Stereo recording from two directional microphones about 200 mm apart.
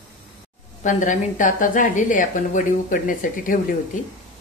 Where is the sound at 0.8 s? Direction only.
40° left (ahead or behind).